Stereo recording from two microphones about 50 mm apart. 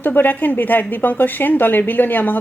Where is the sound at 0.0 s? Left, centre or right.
Left.